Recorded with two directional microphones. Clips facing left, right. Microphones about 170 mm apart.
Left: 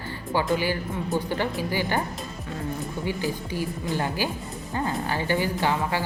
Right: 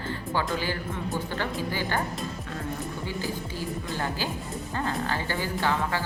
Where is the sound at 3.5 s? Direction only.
10° left (ahead or behind).